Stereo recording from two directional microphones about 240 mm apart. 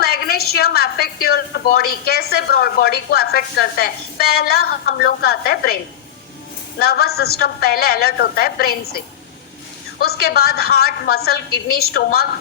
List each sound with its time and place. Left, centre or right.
0.0 s a woman's voice: left
6.7 s a woman's voice: left